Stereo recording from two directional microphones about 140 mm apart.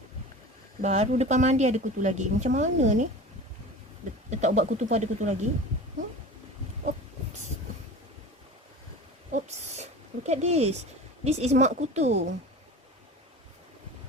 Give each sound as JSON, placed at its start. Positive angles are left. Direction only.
{"t": 0.8, "sound": "speech", "side_deg": -55}
{"t": 4.3, "sound": "speech", "side_deg": -60}
{"t": 9.3, "sound": "a sound", "side_deg": -50}
{"t": 11.2, "sound": "a woman's voice", "side_deg": -50}